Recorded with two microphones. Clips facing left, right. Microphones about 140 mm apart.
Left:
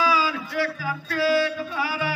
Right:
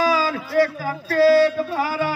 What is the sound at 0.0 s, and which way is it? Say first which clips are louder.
Music: right 3 dB; 45° right (ahead or behind).